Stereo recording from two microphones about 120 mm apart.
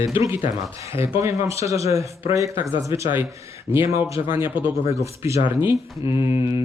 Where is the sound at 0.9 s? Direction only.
50° left (ahead or behind).